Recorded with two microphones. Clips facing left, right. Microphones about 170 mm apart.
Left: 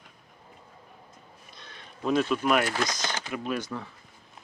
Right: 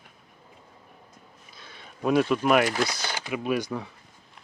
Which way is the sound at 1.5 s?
10° right (ahead or behind).